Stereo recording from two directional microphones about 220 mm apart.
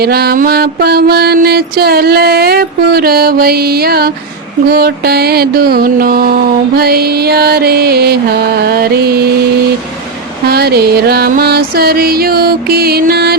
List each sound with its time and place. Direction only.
0.0 s music: 45° right (ahead or behind)
10.4 s music: 45° right (ahead or behind)